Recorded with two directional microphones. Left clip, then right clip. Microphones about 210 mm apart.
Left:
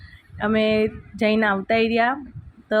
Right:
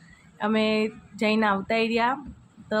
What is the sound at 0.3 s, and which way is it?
Speech, 10° left (ahead or behind).